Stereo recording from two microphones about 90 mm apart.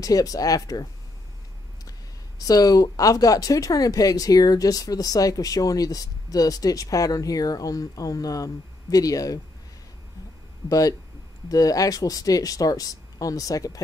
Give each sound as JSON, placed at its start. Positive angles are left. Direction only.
{"t": 0.0, "sound": "speech", "side_deg": 40}
{"t": 1.9, "sound": "speech", "side_deg": 40}
{"t": 10.7, "sound": "speech", "side_deg": 40}